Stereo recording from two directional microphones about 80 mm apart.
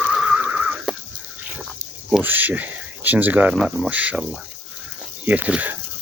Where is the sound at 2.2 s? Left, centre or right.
Right.